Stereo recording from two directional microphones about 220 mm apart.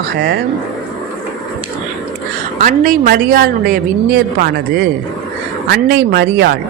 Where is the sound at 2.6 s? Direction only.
35° right (ahead or behind).